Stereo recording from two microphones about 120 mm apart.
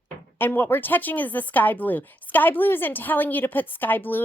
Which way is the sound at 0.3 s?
15° left (ahead or behind).